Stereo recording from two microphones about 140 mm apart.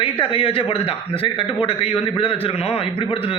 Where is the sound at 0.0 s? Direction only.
40° left (ahead or behind).